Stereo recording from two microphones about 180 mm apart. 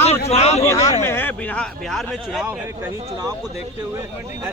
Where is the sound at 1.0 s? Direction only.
10° left (ahead or behind).